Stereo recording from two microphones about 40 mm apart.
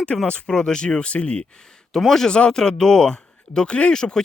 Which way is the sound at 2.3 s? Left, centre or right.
Left.